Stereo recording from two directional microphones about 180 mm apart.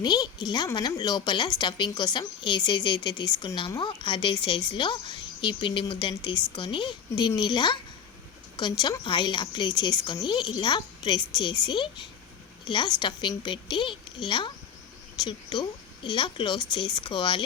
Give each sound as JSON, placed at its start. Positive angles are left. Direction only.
{"t": 0.0, "sound": "a woman's voice", "side_deg": 25}